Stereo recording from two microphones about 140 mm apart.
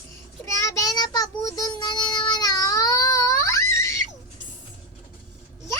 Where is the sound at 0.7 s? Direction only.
25° left (ahead or behind).